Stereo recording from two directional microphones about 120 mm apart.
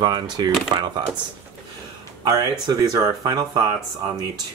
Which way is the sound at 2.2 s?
30° right (ahead or behind).